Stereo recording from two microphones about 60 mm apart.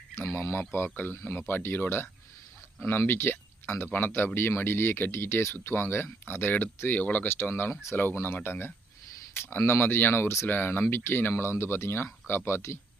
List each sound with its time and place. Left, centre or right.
0.2 s speech: left
1.4 s speech: left
5.5 s speech: left
7.7 s speech: left
7.9 s speech: left